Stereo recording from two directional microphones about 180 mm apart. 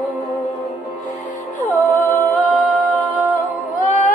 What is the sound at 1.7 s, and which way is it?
Humming, 5° left (ahead or behind).